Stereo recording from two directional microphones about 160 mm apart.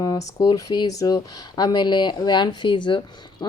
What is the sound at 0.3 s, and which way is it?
A woman's voice, 20° left (ahead or behind).